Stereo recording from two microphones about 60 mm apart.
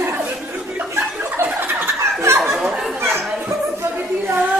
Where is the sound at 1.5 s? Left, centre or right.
Right.